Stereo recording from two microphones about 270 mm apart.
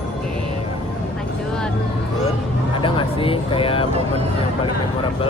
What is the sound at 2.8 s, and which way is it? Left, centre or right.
Speech, centre.